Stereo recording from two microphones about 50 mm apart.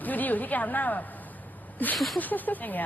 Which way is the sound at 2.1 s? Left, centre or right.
Left.